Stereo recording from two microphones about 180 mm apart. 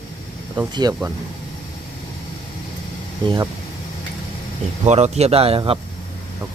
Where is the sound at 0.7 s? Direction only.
25° right (ahead or behind).